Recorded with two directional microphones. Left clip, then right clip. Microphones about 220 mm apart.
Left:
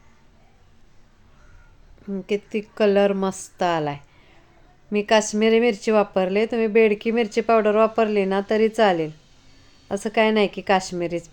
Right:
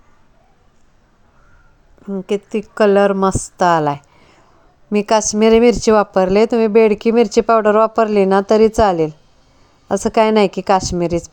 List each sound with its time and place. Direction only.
2.0 s a woman's voice: 15° right (ahead or behind)